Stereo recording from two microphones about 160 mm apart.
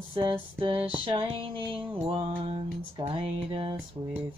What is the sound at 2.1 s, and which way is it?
Music, 35° right (ahead or behind).